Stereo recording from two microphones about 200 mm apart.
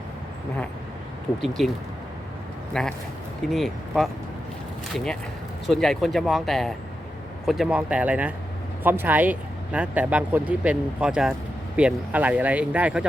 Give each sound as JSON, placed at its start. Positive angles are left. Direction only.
{"t": 1.4, "sound": "speech", "side_deg": 0}
{"t": 2.8, "sound": "speech", "side_deg": 0}
{"t": 5.6, "sound": "speech", "side_deg": 0}